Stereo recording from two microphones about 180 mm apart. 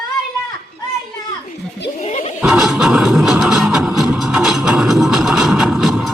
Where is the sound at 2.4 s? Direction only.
Centre (ahead or behind).